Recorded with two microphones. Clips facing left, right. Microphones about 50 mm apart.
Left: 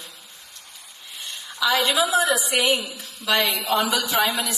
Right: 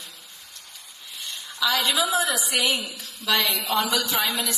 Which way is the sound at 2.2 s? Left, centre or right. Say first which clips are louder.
Left 4 dB; left.